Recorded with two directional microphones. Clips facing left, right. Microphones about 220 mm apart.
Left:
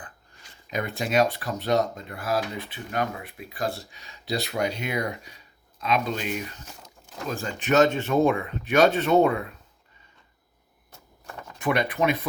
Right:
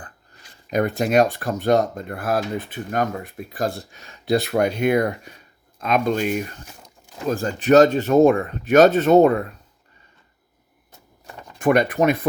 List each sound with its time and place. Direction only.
0.7 s speech: 45° right (ahead or behind)
7.3 s speech: 40° right (ahead or behind)
11.3 s a sound: 15° right (ahead or behind)
11.6 s speech: 50° right (ahead or behind)